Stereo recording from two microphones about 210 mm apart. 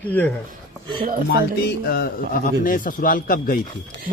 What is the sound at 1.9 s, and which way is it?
Speech, 45° left (ahead or behind).